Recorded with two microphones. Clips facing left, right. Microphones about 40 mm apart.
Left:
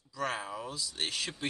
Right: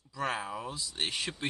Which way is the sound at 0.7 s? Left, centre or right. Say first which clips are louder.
Even; right.